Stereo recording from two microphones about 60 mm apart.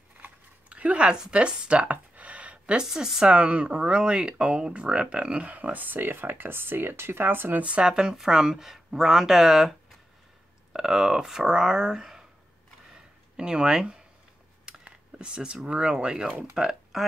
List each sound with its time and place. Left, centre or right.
0.2 s speech: right
7.6 s speech: centre
13.4 s speech: centre
16.5 s speech: centre